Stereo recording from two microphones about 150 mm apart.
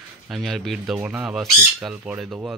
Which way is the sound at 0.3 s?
Centre (ahead or behind).